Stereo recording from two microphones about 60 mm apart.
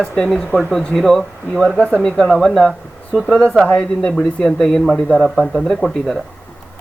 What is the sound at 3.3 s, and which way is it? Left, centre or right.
Speech, centre.